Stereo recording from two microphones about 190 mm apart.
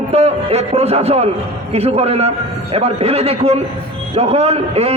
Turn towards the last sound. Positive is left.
turn(degrees=-35)  # may be behind; listen again after turning